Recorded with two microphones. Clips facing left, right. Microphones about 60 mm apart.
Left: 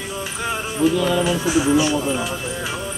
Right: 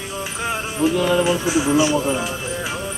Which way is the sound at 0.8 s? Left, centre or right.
Right.